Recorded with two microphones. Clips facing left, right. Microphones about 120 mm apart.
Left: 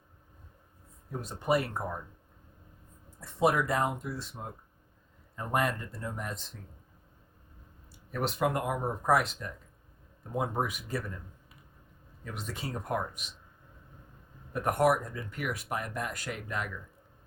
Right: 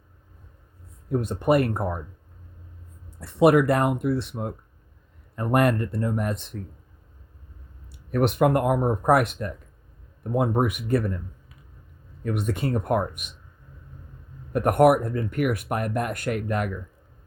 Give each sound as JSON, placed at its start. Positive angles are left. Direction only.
{"t": 1.1, "sound": "speech", "side_deg": -60}
{"t": 3.2, "sound": "speech", "side_deg": -70}
{"t": 7.9, "sound": "speech", "side_deg": -65}
{"t": 12.2, "sound": "speech", "side_deg": -60}
{"t": 14.5, "sound": "speech", "side_deg": -60}